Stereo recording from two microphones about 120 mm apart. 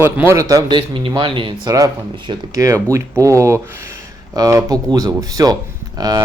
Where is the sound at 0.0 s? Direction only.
20° right (ahead or behind).